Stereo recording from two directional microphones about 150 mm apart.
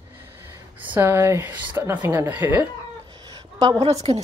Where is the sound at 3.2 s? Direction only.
30° right (ahead or behind).